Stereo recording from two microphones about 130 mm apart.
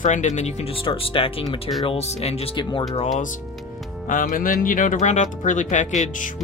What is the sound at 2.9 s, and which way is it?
Speech, 55° left (ahead or behind).